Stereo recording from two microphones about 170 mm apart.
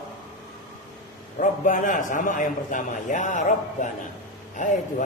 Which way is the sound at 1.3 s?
50° left (ahead or behind).